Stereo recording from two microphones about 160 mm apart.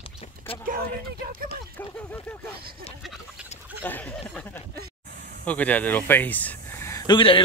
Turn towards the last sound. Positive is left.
turn(degrees=30)  # may be behind; listen again after turning